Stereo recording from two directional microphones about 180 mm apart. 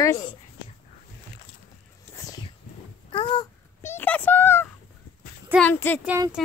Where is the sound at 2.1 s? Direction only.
20° left (ahead or behind).